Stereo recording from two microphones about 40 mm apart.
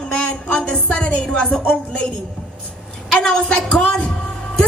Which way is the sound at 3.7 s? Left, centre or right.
Left.